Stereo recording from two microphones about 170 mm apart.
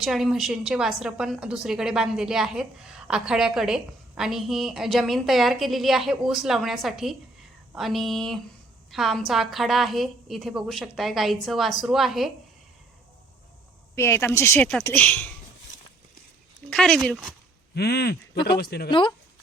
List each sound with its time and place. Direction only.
0.0 s a woman's voice: centre (ahead or behind)
13.9 s a woman's voice: 15° left (ahead or behind)
16.6 s a woman's voice: 5° left (ahead or behind)
17.7 s speech: 70° left (ahead or behind)
18.9 s speech: 30° left (ahead or behind)